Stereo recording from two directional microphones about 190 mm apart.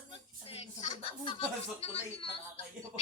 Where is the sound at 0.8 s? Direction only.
35° left (ahead or behind).